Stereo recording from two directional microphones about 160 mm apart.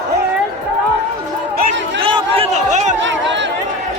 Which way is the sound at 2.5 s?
45° right (ahead or behind).